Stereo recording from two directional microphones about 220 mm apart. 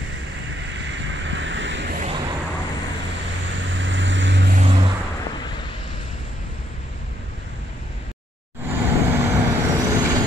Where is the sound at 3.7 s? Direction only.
55° right (ahead or behind).